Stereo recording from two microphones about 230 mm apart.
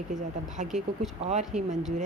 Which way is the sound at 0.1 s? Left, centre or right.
Right.